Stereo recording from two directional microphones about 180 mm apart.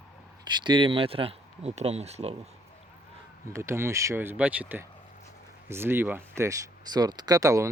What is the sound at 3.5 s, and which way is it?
Speech, 15° right (ahead or behind).